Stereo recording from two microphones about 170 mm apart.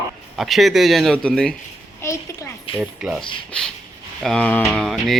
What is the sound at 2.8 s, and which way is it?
Speech, centre (ahead or behind).